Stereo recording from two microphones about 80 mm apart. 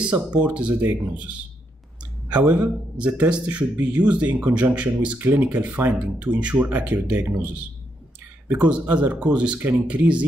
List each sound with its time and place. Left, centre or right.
0.0 s speech: centre
0.7 s speech: right
2.5 s speech: centre
8.6 s speech: centre